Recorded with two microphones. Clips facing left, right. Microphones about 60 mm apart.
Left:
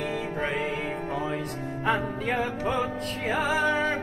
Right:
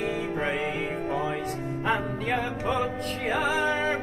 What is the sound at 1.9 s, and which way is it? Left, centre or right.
Music, centre.